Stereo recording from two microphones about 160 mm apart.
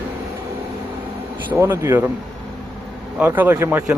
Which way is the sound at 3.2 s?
10° right (ahead or behind).